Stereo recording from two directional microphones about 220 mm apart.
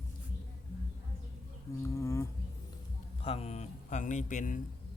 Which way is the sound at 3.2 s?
25° left (ahead or behind).